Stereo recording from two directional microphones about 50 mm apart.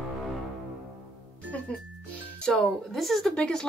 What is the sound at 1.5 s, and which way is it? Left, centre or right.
Music, left.